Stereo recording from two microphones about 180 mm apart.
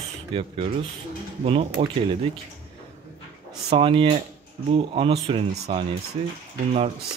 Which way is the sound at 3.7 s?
30° right (ahead or behind).